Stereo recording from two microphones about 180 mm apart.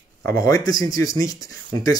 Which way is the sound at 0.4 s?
20° left (ahead or behind).